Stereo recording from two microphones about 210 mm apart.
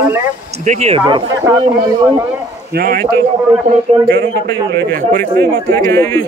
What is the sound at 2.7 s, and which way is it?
Speech, 45° right (ahead or behind).